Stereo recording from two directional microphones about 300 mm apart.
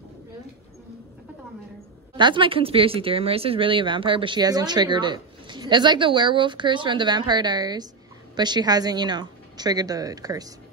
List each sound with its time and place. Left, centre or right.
2.1 s speech: centre